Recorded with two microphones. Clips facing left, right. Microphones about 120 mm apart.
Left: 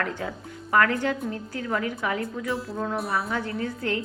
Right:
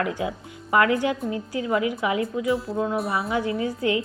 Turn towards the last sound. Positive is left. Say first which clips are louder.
# right 4 dB
turn(degrees=55)  # may be behind; listen again after turning